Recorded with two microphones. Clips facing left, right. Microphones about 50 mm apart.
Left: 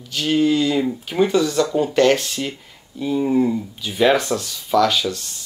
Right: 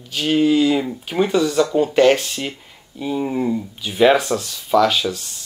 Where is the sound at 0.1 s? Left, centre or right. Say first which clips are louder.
Right 1 dB; centre.